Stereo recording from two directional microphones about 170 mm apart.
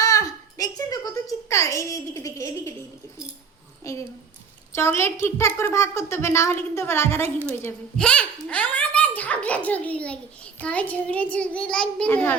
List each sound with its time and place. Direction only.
0.0 s a sound: 20° left (ahead or behind)
3.9 s a child's voice: 20° left (ahead or behind)
7.9 s a child's voice: 5° left (ahead or behind)